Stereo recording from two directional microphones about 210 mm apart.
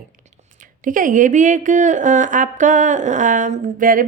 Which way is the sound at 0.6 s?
40° right (ahead or behind).